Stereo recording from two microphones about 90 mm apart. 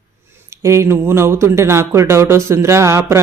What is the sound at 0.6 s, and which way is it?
Speech, 30° right (ahead or behind).